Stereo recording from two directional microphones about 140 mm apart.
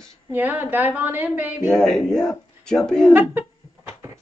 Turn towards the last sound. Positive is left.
turn(degrees=5)  # may be behind; listen again after turning